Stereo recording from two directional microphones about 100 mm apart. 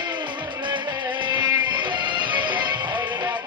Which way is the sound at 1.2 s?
50° right (ahead or behind).